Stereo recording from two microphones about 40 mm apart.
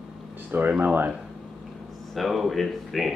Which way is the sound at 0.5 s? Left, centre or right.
Right.